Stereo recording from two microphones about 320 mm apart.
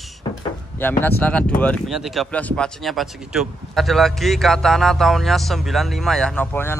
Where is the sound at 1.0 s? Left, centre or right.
Centre.